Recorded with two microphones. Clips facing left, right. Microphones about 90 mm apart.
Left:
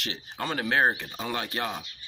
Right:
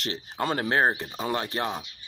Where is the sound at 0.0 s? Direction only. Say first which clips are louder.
Right 4 dB; 35° right (ahead or behind).